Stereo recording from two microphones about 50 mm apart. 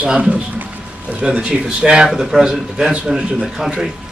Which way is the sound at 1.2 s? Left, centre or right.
Centre.